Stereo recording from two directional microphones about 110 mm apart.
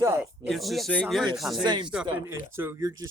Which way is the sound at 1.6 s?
45° right (ahead or behind).